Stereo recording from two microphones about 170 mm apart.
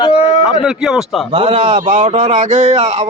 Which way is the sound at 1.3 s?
30° right (ahead or behind).